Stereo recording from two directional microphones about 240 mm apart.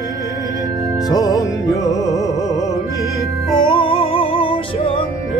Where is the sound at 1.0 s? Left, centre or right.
Centre.